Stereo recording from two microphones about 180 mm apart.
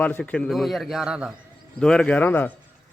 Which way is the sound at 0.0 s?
10° left (ahead or behind).